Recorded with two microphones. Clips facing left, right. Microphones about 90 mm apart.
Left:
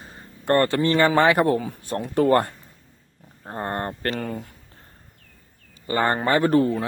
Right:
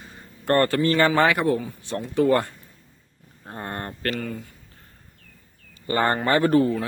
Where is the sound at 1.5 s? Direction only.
55° left (ahead or behind).